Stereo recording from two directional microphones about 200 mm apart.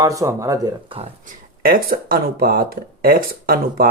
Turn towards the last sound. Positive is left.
turn(degrees=-45)  # may be behind; listen again after turning